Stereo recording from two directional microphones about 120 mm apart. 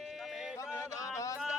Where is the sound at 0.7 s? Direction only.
25° left (ahead or behind).